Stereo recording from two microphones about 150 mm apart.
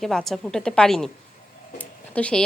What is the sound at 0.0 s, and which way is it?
A woman's voice, centre (ahead or behind).